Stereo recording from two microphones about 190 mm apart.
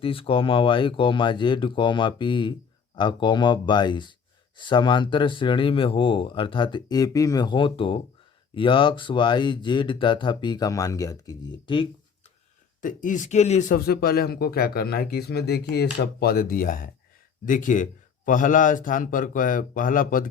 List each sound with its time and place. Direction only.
0.0 s speech: 30° left (ahead or behind)
12.8 s a man's voice: 45° left (ahead or behind)